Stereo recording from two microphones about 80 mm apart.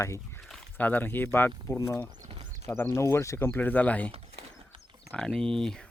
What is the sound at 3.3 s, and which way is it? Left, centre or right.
Speech, left.